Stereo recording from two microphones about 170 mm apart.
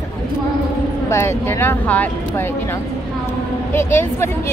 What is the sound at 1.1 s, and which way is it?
A woman's voice, 15° left (ahead or behind).